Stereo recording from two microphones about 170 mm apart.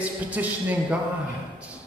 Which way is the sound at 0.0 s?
10° right (ahead or behind).